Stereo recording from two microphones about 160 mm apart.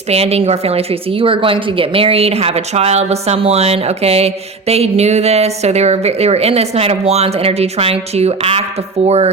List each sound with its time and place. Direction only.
0.1 s a woman's voice: 40° right (ahead or behind)